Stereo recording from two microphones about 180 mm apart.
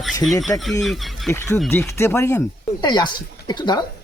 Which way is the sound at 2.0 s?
15° left (ahead or behind).